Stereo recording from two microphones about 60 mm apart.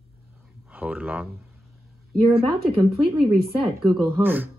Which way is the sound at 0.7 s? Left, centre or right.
Right.